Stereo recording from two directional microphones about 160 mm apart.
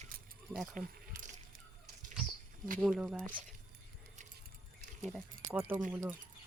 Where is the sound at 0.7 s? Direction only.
55° right (ahead or behind).